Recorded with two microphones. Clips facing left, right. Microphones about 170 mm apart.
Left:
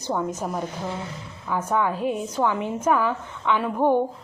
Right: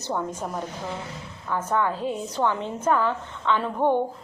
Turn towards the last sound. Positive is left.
turn(degrees=5)  # may be behind; listen again after turning